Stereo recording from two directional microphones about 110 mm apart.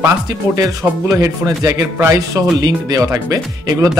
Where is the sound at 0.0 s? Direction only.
30° right (ahead or behind).